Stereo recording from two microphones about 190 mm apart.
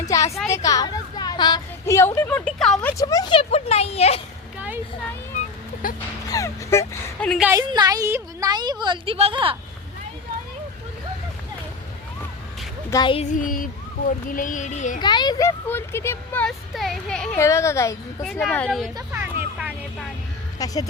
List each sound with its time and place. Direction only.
0.1 s a sound: 15° left (ahead or behind)
0.4 s a woman's voice: 15° left (ahead or behind)
3.0 s speech: 20° left (ahead or behind)
6.2 s speech: 15° left (ahead or behind)
7.3 s speech: 5° right (ahead or behind)
7.5 s a woman's voice: 20° right (ahead or behind)
12.9 s speech: 25° left (ahead or behind)
13.3 s a child's voice: 45° left (ahead or behind)
15.0 s speech: 25° left (ahead or behind); by 17.3 s 5° left (ahead or behind)
17.3 s speech: 15° left (ahead or behind)
18.2 s speech: centre (ahead or behind)
18.9 s vehicle: 10° right (ahead or behind)
20.6 s speech: 20° left (ahead or behind)